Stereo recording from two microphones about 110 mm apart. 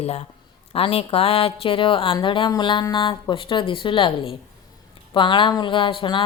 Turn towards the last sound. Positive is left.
turn(degrees=50)  # may be behind; listen again after turning